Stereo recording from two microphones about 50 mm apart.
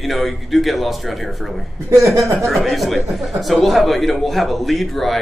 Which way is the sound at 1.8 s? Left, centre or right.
Right.